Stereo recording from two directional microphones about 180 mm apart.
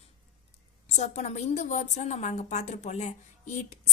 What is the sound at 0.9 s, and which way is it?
A woman's voice, 40° left (ahead or behind).